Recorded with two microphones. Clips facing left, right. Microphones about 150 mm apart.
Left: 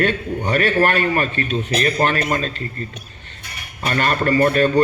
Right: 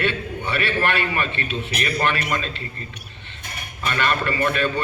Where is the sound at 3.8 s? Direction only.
40° left (ahead or behind).